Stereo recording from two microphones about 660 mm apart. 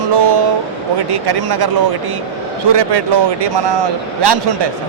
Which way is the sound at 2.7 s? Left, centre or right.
Right.